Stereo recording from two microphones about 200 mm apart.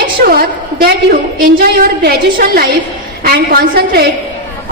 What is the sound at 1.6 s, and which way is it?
A woman's voice, 45° right (ahead or behind).